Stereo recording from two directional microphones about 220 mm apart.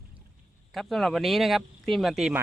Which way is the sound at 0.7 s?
Centre (ahead or behind).